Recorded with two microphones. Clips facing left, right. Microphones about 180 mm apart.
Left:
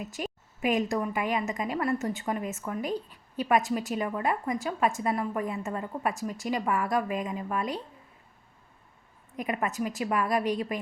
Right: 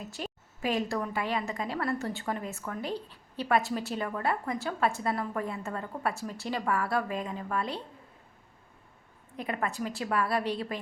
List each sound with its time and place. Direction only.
0.0 s a woman's voice: 15° left (ahead or behind)
9.3 s a woman's voice: 15° left (ahead or behind)